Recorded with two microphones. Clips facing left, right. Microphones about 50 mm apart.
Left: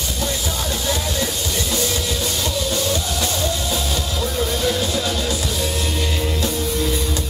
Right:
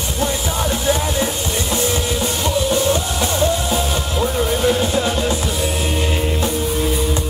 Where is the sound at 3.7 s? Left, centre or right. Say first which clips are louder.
Right 4 dB; right.